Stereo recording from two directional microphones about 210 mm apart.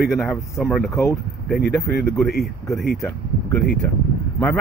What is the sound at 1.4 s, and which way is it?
Speech, centre (ahead or behind).